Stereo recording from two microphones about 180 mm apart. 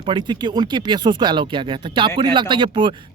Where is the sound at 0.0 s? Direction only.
25° right (ahead or behind).